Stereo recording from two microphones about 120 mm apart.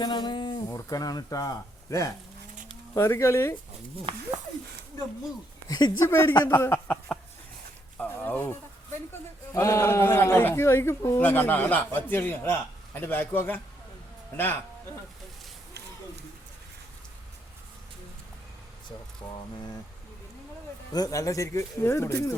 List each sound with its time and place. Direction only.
0.0 s a man's voice: 35° left (ahead or behind); by 3.6 s 20° left (ahead or behind)
4.1 s speech: 50° right (ahead or behind)
5.6 s speech: 30° left (ahead or behind)
6.1 s a man's voice: 20° left (ahead or behind)
7.9 s a sound: 15° left (ahead or behind)
9.5 s a man's voice: 25° left (ahead or behind)
19.2 s speech: 35° left (ahead or behind)
20.9 s a man's voice: 30° left (ahead or behind)